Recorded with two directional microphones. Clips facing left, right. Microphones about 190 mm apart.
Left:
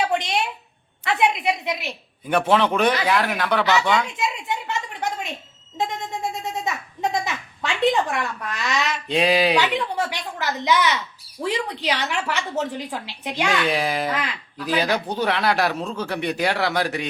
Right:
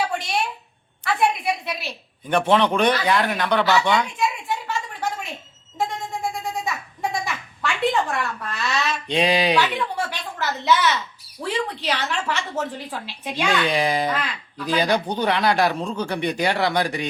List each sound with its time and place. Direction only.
0.2 s a sound: 20° left (ahead or behind)
1.0 s a woman's voice: 20° left (ahead or behind)
2.2 s speech: 5° left (ahead or behind)
4.2 s a sound: 20° left (ahead or behind)
7.0 s a child's voice: 20° left (ahead or behind)
9.0 s speech: centre (ahead or behind)
9.6 s a child's voice: 15° left (ahead or behind)
13.7 s speech: 5° left (ahead or behind)